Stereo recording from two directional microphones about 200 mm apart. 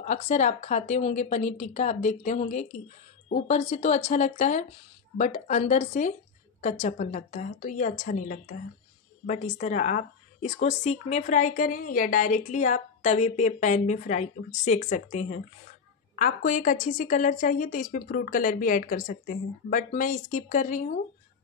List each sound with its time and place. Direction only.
0.0 s a woman's voice: 35° left (ahead or behind)